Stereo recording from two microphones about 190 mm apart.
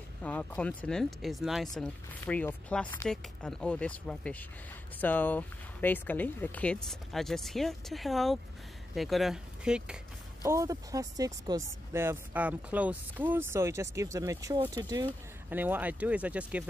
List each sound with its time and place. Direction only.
0.2 s speech: 5° left (ahead or behind)
10.4 s speech: 15° right (ahead or behind)
15.5 s speech: 10° right (ahead or behind)